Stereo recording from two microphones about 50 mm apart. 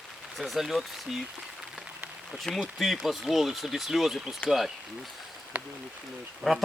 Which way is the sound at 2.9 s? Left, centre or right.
Centre.